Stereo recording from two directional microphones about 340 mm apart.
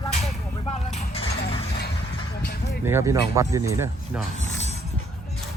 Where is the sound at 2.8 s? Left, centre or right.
Centre.